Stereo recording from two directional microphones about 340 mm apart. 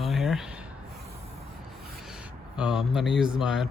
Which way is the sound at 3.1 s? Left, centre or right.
Centre.